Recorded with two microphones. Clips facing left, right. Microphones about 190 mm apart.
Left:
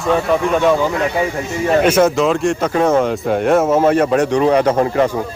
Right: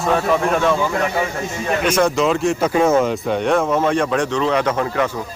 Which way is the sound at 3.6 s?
25° left (ahead or behind).